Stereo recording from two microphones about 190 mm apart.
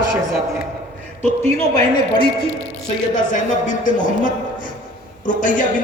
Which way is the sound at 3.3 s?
40° left (ahead or behind).